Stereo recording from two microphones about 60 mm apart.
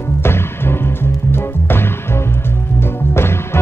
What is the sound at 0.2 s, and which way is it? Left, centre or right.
Music, left.